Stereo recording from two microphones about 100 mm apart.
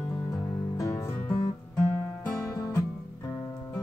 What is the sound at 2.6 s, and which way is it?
Music, 35° left (ahead or behind).